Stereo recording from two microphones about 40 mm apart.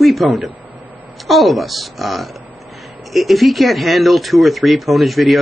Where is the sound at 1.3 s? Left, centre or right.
Centre.